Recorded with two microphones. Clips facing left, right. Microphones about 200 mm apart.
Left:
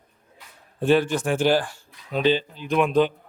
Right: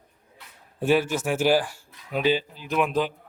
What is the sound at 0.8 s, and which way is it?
A man's voice, 5° right (ahead or behind).